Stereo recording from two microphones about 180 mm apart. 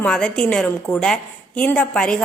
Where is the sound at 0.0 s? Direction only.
5° left (ahead or behind).